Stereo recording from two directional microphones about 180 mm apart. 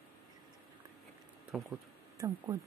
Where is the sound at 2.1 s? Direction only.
20° right (ahead or behind).